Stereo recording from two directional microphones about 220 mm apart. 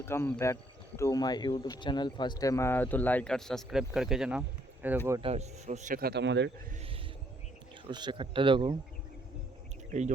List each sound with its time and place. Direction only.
0.0 s speech: 10° left (ahead or behind); by 4.9 s 5° right (ahead or behind)
5.2 s speech: 30° right (ahead or behind); by 6.5 s 50° right (ahead or behind)
7.9 s speech: 20° right (ahead or behind)